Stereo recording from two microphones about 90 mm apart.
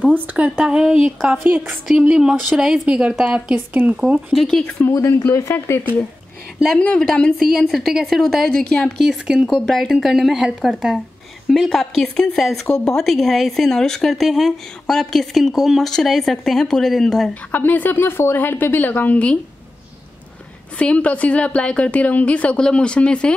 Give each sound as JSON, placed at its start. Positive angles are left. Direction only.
{"t": 0.0, "sound": "speech", "side_deg": -15}
{"t": 4.3, "sound": "a woman's voice", "side_deg": 0}
{"t": 4.9, "sound": "speech", "side_deg": 30}
{"t": 6.8, "sound": "a woman's voice", "side_deg": 10}
{"t": 9.0, "sound": "a woman's voice", "side_deg": -5}
{"t": 17.3, "sound": "a woman's voice", "side_deg": 20}
{"t": 20.7, "sound": "a woman's voice", "side_deg": 15}